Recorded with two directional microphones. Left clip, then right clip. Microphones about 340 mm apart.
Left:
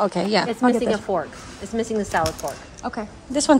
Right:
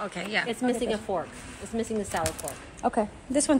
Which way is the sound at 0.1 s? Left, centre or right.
Centre.